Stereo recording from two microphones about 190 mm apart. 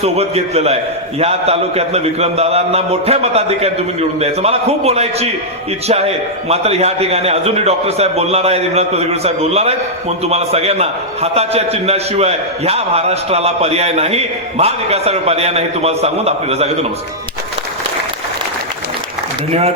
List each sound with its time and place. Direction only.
0.0 s a man's voice: 35° right (ahead or behind)